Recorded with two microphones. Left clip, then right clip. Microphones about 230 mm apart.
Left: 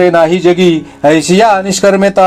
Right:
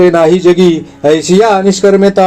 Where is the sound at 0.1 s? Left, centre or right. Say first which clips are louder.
Right 1 dB; left.